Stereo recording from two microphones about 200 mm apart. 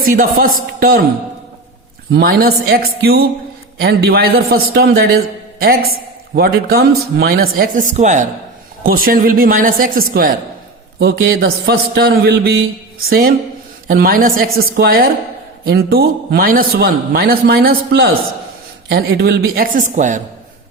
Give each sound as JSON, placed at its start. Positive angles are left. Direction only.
{"t": 0.0, "sound": "a man's voice", "side_deg": -45}
{"t": 2.1, "sound": "a man's voice", "side_deg": -50}
{"t": 11.0, "sound": "a man's voice", "side_deg": -55}